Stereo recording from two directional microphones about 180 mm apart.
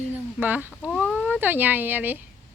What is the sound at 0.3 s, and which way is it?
Speech, 10° right (ahead or behind).